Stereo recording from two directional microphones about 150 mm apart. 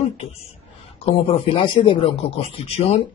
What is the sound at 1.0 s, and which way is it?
Speech, 40° left (ahead or behind).